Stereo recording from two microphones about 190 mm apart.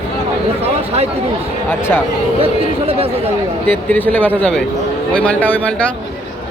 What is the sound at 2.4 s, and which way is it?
Speech, 30° right (ahead or behind).